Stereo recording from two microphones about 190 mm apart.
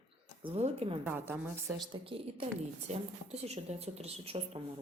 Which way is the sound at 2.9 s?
40° right (ahead or behind).